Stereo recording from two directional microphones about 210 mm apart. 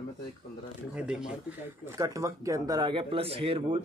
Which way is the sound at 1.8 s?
15° right (ahead or behind).